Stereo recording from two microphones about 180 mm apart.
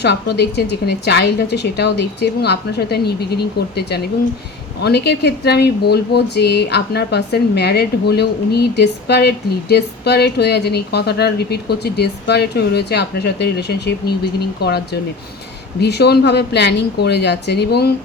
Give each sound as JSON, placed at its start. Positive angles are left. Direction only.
{"t": 0.0, "sound": "a woman's voice", "side_deg": 65}
{"t": 15.8, "sound": "speech", "side_deg": 65}